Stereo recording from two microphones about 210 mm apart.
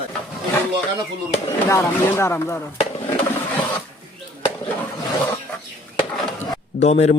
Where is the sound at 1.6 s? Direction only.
10° left (ahead or behind).